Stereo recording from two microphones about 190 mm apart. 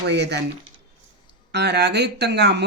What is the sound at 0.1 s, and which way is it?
Speech, 60° right (ahead or behind).